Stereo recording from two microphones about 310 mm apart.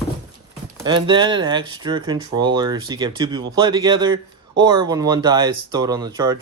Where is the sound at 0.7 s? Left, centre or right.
Centre.